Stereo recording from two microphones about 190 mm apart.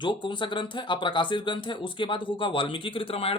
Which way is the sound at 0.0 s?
25° left (ahead or behind).